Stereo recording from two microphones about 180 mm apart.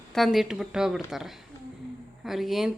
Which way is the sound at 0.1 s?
Centre (ahead or behind).